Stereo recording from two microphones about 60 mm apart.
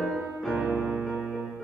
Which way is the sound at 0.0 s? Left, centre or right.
Centre.